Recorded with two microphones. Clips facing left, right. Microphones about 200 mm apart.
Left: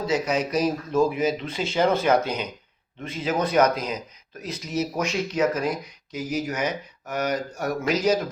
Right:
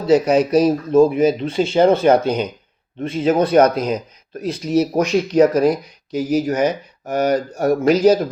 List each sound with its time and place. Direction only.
0.0 s speech: 30° right (ahead or behind)